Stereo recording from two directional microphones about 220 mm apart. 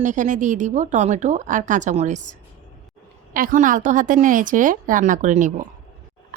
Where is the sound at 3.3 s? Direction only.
40° right (ahead or behind).